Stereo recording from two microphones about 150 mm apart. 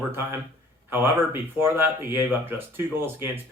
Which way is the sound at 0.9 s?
15° right (ahead or behind).